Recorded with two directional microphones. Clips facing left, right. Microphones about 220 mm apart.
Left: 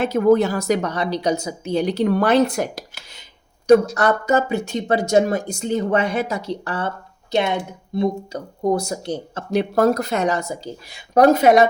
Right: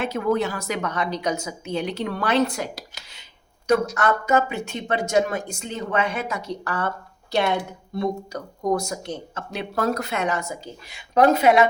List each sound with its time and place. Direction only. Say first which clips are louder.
0.0 s speech: left 7 dB; 40° left (ahead or behind)
3.7 s speech: left 6 dB; 35° left (ahead or behind)